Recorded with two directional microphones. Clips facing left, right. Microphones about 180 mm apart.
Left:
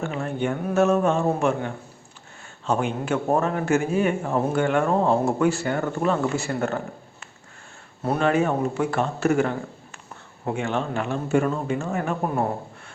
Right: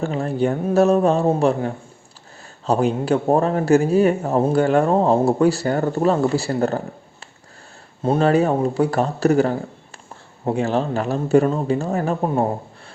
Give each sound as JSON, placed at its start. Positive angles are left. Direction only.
{"t": 0.0, "sound": "speech", "side_deg": -35}
{"t": 8.0, "sound": "speech", "side_deg": -30}